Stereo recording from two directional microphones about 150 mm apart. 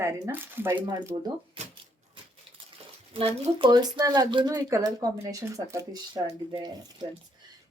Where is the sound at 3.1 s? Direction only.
40° right (ahead or behind); by 6.0 s 25° right (ahead or behind).